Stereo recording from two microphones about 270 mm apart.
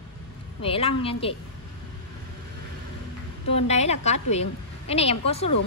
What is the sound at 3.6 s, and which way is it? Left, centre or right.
A woman's voice, left.